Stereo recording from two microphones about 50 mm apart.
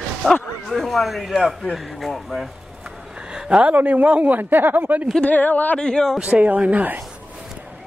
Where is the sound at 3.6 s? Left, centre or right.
Right.